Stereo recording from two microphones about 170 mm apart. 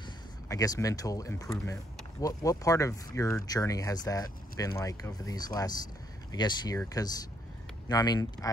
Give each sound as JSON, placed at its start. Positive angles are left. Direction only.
{"t": 0.5, "sound": "speech", "side_deg": 20}